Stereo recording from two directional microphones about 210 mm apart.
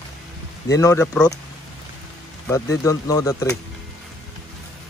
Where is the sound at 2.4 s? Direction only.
15° left (ahead or behind).